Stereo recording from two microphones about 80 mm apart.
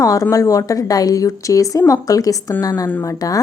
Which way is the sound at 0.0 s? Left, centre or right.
Left.